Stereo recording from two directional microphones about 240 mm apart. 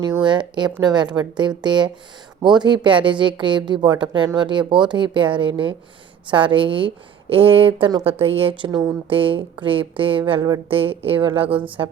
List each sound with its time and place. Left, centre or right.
0.1 s a woman's voice: centre